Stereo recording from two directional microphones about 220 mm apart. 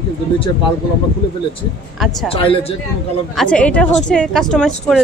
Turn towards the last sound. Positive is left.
turn(degrees=0)  # may be behind; listen again after turning